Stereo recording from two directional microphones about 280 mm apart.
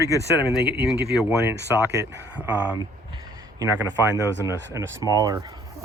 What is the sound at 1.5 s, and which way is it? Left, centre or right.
Speech, right.